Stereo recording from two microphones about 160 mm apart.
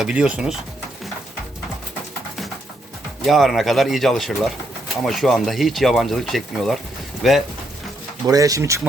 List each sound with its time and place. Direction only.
0.0 s speech: 5° right (ahead or behind)
3.2 s speech: centre (ahead or behind)
8.3 s speech: 20° right (ahead or behind)